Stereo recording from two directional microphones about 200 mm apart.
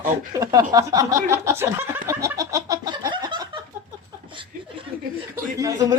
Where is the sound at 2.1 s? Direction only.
15° right (ahead or behind).